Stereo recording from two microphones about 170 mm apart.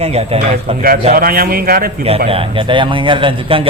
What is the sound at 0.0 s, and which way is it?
Speech, 40° right (ahead or behind).